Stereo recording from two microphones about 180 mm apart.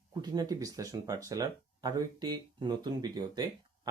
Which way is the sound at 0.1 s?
20° right (ahead or behind).